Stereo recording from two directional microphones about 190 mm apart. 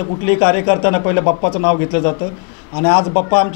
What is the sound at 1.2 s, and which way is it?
A man's voice, 30° left (ahead or behind).